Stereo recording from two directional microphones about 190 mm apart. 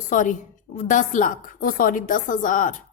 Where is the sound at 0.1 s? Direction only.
40° left (ahead or behind).